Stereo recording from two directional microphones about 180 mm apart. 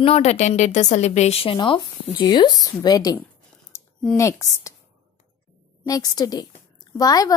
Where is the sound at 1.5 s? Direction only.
25° left (ahead or behind).